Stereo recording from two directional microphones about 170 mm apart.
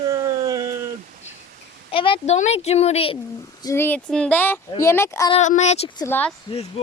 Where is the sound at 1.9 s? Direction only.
30° left (ahead or behind).